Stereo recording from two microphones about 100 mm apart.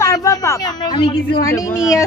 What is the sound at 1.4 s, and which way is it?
Speech, 35° left (ahead or behind).